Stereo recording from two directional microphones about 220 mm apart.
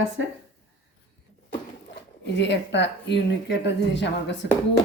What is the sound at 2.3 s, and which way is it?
Speech, 50° left (ahead or behind).